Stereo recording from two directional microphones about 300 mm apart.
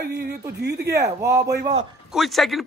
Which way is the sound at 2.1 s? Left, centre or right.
Centre.